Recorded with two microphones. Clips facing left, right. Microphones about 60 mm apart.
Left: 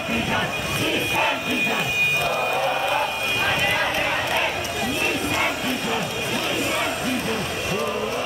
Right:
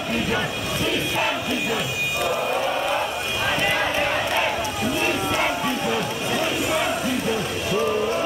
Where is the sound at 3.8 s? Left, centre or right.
Centre.